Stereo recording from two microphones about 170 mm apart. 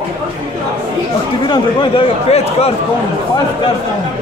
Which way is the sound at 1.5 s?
30° left (ahead or behind).